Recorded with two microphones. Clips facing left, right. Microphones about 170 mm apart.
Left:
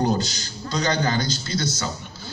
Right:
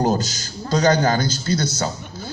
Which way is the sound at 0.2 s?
45° right (ahead or behind).